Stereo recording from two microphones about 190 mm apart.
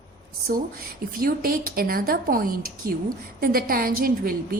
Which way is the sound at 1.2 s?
50° right (ahead or behind).